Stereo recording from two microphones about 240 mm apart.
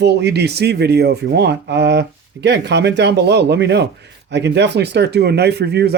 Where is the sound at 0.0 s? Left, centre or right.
Right.